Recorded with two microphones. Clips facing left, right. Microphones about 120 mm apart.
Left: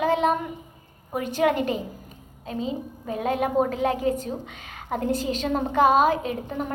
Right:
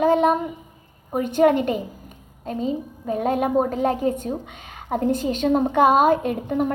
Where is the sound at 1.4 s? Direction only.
45° right (ahead or behind).